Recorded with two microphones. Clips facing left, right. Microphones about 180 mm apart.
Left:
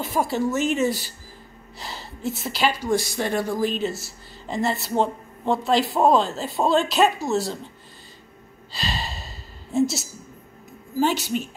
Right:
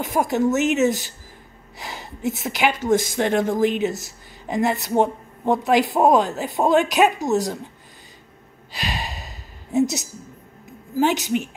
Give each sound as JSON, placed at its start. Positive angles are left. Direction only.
{"t": 0.0, "sound": "a woman's voice", "side_deg": -20}
{"t": 8.7, "sound": "sigh", "side_deg": -15}
{"t": 11.0, "sound": "a man's voice", "side_deg": -15}